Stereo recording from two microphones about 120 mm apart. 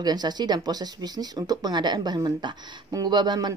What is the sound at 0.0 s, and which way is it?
Speech, 35° right (ahead or behind).